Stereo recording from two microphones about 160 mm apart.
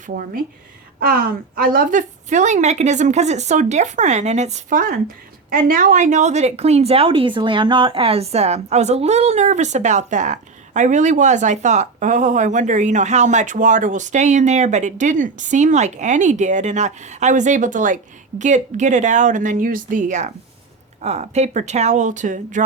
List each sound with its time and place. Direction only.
0.0 s a woman's voice: 60° right (ahead or behind)